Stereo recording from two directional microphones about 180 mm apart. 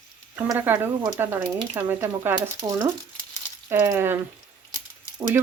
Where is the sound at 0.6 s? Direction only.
10° right (ahead or behind).